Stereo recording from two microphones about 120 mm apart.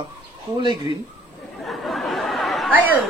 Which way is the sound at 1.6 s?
Centre (ahead or behind).